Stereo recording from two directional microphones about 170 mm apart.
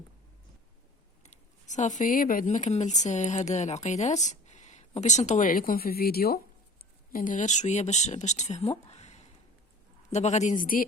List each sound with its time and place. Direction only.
1.2 s speech: 45° left (ahead or behind)